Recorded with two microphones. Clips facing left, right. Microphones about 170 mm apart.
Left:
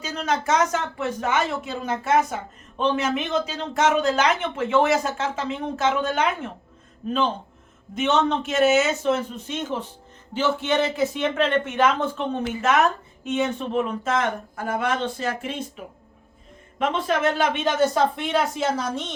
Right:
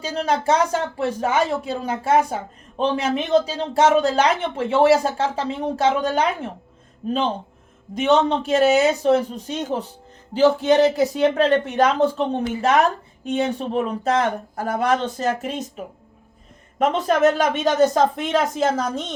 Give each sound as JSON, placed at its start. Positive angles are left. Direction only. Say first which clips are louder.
{"t": 0.0, "sound": "speech", "louder": "right 4 dB", "side_deg": -30}